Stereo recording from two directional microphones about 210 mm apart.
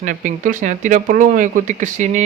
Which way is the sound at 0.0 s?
35° right (ahead or behind).